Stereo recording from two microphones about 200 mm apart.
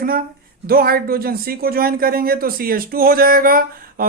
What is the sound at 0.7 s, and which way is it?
Speech, 50° right (ahead or behind).